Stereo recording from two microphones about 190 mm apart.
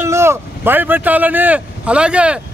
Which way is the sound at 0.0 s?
15° right (ahead or behind).